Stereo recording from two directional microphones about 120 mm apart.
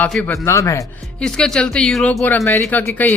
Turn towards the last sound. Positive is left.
turn(degrees=20)  # may be behind; listen again after turning